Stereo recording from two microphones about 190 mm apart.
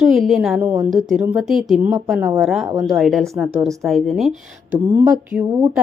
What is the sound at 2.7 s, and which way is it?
Speech, 15° right (ahead or behind).